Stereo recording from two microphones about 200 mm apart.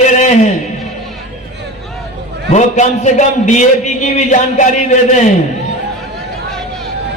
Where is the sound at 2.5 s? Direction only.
35° left (ahead or behind).